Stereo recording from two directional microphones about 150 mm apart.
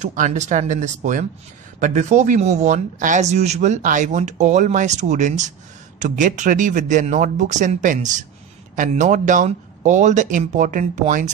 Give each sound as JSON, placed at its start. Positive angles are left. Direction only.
{"t": 0.0, "sound": "speech", "side_deg": -55}